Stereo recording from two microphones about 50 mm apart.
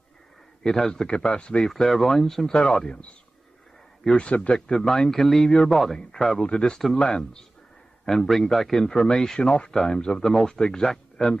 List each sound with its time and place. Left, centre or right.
0.7 s a man's voice: centre
1.1 s speech: left
1.7 s a man's voice: centre
4.2 s speech: left
4.6 s a man's voice: centre
6.4 s a man's voice: centre